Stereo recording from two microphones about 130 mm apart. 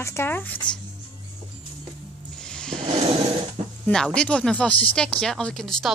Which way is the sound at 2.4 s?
5° left (ahead or behind).